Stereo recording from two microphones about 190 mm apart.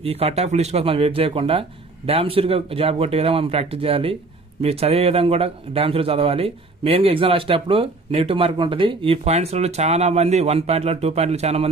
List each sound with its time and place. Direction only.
0.0 s speech: 30° right (ahead or behind)